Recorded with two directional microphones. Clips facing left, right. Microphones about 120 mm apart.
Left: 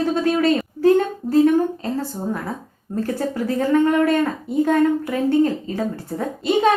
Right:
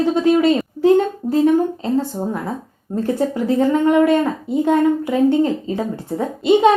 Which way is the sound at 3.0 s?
20° right (ahead or behind).